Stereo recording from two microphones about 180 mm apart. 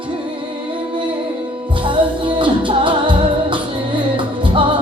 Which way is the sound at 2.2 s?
25° right (ahead or behind).